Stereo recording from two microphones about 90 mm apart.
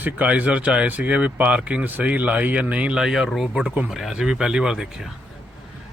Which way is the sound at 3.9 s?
Centre (ahead or behind).